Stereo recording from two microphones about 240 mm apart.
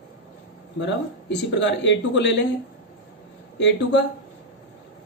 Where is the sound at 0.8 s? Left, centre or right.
Left.